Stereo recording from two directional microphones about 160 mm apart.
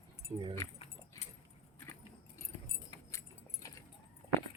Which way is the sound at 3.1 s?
20° left (ahead or behind).